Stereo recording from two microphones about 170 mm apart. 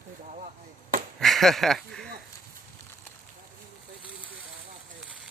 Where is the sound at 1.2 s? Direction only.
Centre (ahead or behind).